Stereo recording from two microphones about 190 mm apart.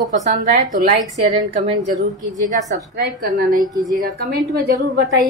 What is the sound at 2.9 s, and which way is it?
Speech, 50° right (ahead or behind).